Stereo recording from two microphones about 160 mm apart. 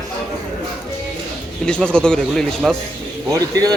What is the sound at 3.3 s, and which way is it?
Speech, 20° right (ahead or behind).